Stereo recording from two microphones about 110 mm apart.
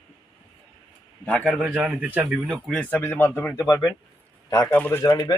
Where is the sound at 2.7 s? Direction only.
15° left (ahead or behind); by 3.9 s 30° left (ahead or behind).